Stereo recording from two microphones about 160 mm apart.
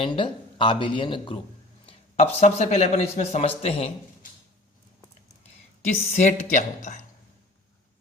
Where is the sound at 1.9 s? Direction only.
40° left (ahead or behind).